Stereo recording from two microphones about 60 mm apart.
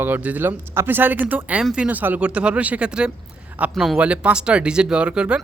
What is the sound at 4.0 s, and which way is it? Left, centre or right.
Speech, right.